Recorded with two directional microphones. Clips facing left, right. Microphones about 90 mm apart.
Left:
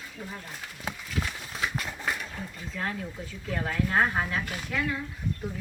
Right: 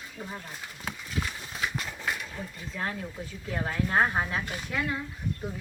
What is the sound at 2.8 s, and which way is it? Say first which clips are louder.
Speech: even; 15° right (ahead or behind).